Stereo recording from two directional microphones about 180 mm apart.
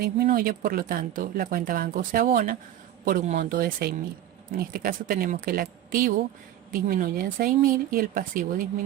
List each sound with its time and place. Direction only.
0.0 s speech: 55° right (ahead or behind)